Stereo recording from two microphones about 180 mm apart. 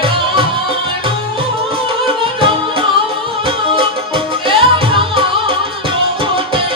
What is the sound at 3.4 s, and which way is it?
Music, 30° right (ahead or behind).